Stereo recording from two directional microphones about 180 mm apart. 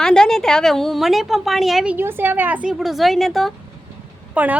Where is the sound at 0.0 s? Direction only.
5° left (ahead or behind).